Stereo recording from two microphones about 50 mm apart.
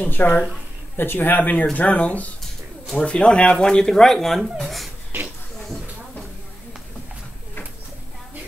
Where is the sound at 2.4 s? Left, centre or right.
Centre.